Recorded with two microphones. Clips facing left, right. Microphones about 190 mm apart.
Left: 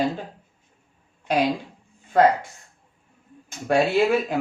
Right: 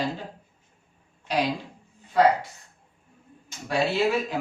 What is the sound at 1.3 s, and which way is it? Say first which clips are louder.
Speech: left 4 dB; 50° left (ahead or behind).